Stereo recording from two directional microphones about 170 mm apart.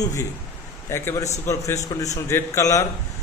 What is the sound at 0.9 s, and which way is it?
A man's voice, 15° left (ahead or behind).